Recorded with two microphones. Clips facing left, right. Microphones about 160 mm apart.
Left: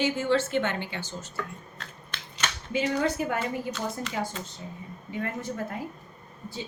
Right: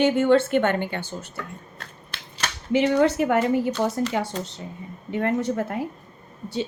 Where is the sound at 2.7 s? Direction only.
70° right (ahead or behind).